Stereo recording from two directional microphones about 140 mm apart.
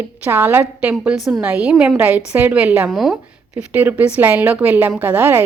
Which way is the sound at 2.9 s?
Centre (ahead or behind).